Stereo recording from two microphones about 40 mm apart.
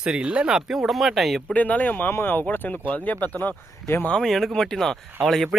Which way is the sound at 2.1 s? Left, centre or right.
Left.